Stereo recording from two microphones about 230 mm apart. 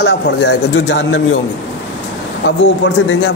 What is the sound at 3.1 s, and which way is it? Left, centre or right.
Speech, left.